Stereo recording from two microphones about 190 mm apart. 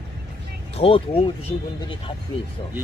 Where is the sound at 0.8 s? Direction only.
30° left (ahead or behind).